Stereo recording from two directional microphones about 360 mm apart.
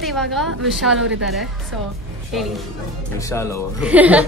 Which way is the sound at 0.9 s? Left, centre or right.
Right.